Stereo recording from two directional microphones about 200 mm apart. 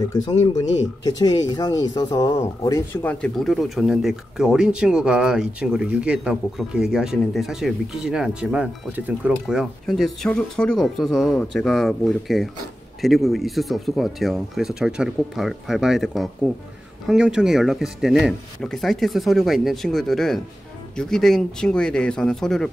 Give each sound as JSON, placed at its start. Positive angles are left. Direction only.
{"t": 0.1, "sound": "speech", "side_deg": 20}